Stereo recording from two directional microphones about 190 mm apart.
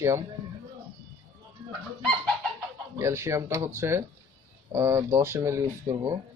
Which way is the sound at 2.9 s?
15° right (ahead or behind).